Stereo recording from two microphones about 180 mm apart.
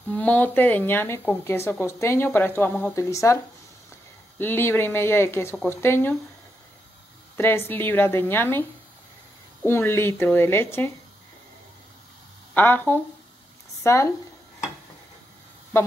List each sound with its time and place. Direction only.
0.1 s speech: 10° left (ahead or behind)
4.4 s speech: 10° left (ahead or behind)
7.3 s speech: 15° left (ahead or behind)
12.5 s speech: 10° left (ahead or behind)